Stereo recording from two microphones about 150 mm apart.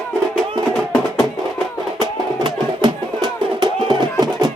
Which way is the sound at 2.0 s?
30° right (ahead or behind).